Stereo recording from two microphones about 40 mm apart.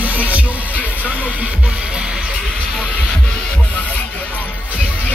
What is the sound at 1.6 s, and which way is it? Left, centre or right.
Music, right.